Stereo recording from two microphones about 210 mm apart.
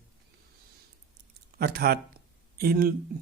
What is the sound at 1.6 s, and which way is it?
Speech, 45° right (ahead or behind).